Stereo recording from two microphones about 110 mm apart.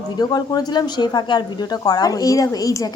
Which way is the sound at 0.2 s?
40° left (ahead or behind).